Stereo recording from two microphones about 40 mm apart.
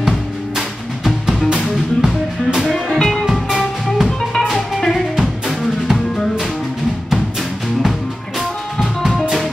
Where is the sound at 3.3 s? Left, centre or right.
Centre.